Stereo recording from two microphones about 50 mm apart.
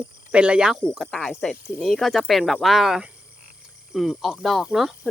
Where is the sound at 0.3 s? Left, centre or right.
Right.